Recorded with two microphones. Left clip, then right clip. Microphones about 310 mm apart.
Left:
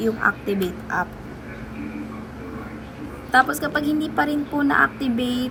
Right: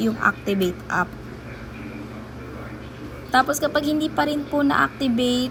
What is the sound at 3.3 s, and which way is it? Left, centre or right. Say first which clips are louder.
A woman's voice: left 1 dB; centre.